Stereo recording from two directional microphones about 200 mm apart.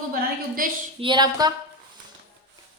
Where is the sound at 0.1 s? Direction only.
45° right (ahead or behind).